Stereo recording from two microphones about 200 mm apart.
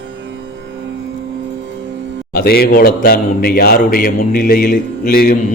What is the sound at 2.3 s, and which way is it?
Speech, 50° left (ahead or behind).